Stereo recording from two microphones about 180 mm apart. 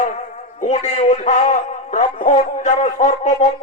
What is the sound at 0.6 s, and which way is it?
A man's voice, 40° left (ahead or behind).